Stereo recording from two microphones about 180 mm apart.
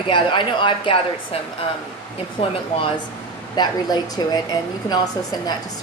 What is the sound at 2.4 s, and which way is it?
Speech, 30° left (ahead or behind).